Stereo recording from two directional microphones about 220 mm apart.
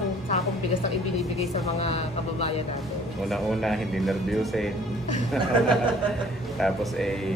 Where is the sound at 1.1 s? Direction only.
30° left (ahead or behind).